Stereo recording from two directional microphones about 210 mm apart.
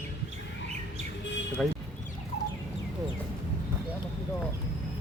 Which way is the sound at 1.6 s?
5° left (ahead or behind).